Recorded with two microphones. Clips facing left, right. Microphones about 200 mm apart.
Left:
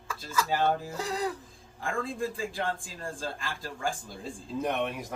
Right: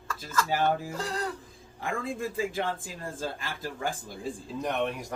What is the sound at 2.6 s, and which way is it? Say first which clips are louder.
Speech: right 1 dB; 20° right (ahead or behind).